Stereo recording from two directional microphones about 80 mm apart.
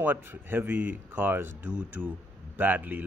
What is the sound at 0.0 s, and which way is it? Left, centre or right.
Speech, right.